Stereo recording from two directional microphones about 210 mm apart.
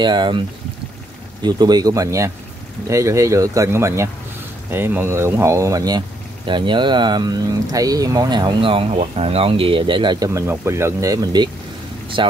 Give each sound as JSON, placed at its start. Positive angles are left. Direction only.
{"t": 0.0, "sound": "speech", "side_deg": -20}
{"t": 1.4, "sound": "speech", "side_deg": -20}